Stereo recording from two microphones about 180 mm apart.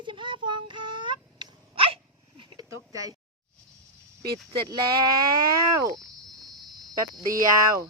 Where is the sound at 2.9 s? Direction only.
20° right (ahead or behind).